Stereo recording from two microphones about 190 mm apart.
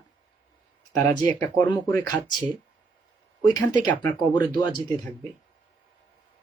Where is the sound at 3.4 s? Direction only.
20° left (ahead or behind).